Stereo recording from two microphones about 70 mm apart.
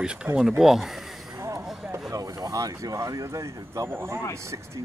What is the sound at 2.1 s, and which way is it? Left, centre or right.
Speech, right.